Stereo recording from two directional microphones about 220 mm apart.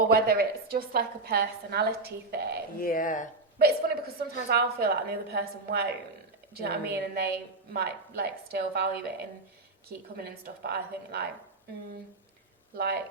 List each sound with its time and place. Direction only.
0.1 s a woman's voice: 45° right (ahead or behind)
2.8 s speech: 40° left (ahead or behind)
3.6 s a woman's voice: 45° right (ahead or behind)
10.2 s a woman's voice: 45° right (ahead or behind)
12.7 s a woman's voice: 45° right (ahead or behind)